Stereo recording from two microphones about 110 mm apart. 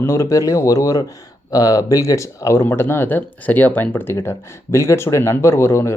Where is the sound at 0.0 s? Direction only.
25° left (ahead or behind).